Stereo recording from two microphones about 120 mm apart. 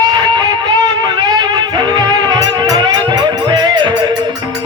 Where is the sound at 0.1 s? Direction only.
40° right (ahead or behind).